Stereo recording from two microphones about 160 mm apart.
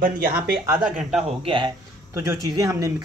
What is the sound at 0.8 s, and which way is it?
Speech, 5° right (ahead or behind).